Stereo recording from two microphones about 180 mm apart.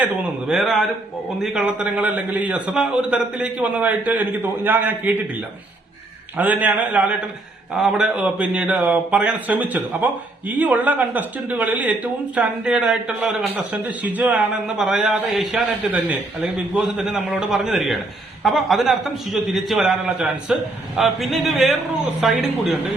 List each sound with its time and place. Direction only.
0.0 s a man's voice: 5° right (ahead or behind)
6.3 s a man's voice: 10° right (ahead or behind)